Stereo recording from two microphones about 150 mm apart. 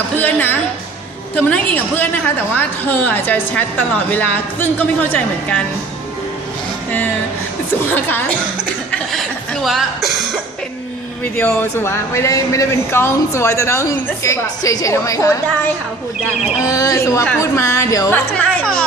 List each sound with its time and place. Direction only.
0.2 s a woman's voice: 10° left (ahead or behind)
7.9 s a woman's voice: 10° left (ahead or behind)
8.9 s speech: centre (ahead or behind)
11.3 s a woman's voice: 15° left (ahead or behind)
16.6 s a woman's voice: 20° left (ahead or behind)
18.3 s a woman's voice: 5° left (ahead or behind)